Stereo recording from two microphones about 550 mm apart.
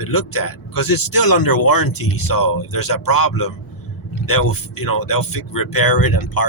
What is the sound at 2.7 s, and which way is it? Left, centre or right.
Speech, left.